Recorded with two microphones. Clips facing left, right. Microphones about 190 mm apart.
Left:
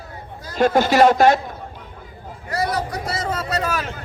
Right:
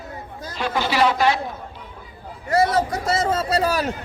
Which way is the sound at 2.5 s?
25° right (ahead or behind).